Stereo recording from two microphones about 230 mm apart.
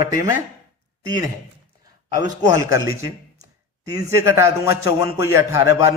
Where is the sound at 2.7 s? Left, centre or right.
Centre.